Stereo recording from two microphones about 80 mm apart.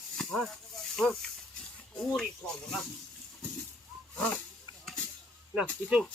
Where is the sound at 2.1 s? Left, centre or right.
Centre.